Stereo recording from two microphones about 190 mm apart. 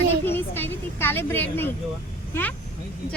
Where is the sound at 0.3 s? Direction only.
10° left (ahead or behind).